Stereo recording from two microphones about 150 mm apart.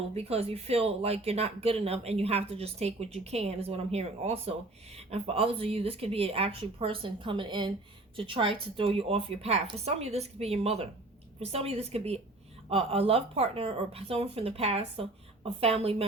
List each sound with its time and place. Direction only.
0.1 s speech: 40° right (ahead or behind)